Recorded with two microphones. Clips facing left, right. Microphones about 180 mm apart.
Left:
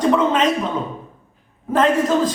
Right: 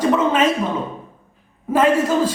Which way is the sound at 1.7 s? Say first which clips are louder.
Even; 10° right (ahead or behind).